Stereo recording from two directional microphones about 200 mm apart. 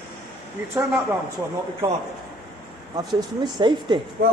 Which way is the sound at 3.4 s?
20° right (ahead or behind).